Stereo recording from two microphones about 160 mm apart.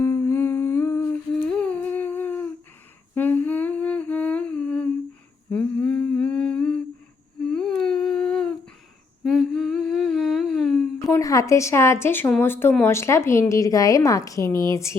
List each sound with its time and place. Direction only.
0.0 s humming: 15° left (ahead or behind)
11.1 s speech: 20° left (ahead or behind)